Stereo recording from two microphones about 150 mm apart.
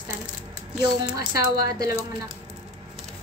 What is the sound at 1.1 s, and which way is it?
Speech, 25° right (ahead or behind).